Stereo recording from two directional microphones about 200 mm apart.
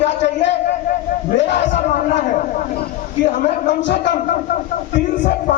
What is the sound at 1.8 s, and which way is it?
Speech, 35° left (ahead or behind).